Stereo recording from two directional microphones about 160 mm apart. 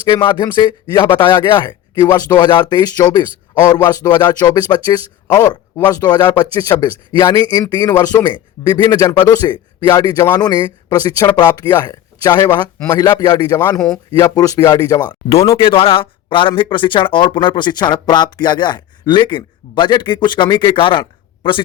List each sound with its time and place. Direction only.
0.0 s speech: 30° left (ahead or behind)
13.6 s speech: 10° left (ahead or behind)
14.1 s speech: 20° left (ahead or behind)